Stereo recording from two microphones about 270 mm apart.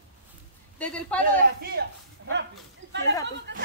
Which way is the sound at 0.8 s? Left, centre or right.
Centre.